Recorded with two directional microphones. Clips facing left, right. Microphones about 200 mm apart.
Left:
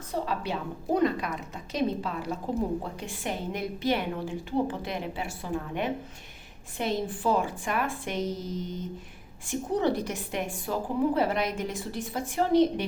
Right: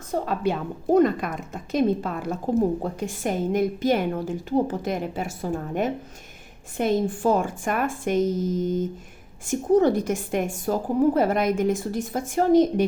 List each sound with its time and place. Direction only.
0.1 s a woman's voice: 50° right (ahead or behind)